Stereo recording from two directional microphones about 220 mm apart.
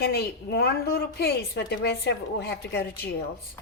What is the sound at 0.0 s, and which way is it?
A woman's voice, 45° left (ahead or behind).